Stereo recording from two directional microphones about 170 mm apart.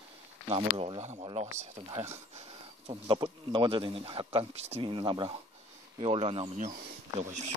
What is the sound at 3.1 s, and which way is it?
Speech, 30° right (ahead or behind).